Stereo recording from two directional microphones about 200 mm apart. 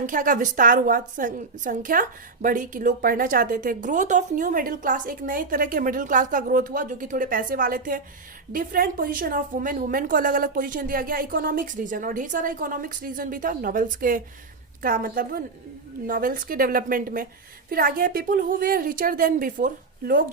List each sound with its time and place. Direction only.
0.0 s a woman's voice: 40° right (ahead or behind)